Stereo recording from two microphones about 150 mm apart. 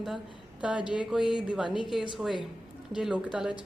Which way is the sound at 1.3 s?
5° right (ahead or behind).